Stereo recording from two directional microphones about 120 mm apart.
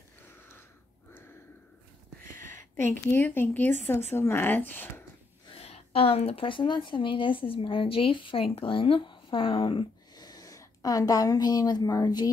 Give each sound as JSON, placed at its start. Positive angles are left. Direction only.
{"t": 2.4, "sound": "speech", "side_deg": 20}
{"t": 5.6, "sound": "speech", "side_deg": 55}
{"t": 10.2, "sound": "a woman's voice", "side_deg": 30}